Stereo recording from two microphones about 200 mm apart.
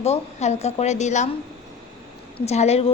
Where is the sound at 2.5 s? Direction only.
30° left (ahead or behind).